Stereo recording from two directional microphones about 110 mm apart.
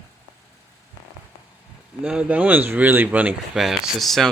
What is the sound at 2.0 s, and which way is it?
Speech, 10° right (ahead or behind).